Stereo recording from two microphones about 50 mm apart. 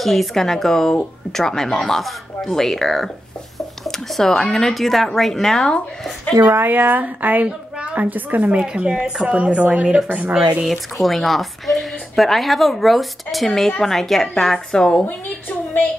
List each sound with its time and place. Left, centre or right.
0.0 s a woman's voice: centre
6.5 s speech: right
10.6 s a woman's voice: centre